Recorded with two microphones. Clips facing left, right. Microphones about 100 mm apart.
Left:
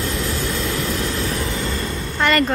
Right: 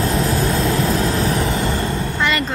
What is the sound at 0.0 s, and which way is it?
Vehicle, 35° right (ahead or behind).